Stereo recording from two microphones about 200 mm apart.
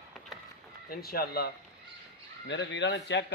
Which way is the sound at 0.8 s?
50° left (ahead or behind).